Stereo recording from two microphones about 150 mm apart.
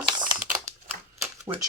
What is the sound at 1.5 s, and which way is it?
Speech, 25° right (ahead or behind).